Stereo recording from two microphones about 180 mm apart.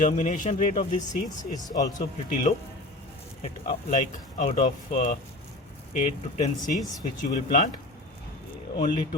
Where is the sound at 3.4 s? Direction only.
35° left (ahead or behind).